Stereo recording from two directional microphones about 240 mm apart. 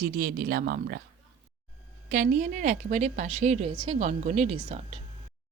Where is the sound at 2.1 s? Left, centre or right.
Right.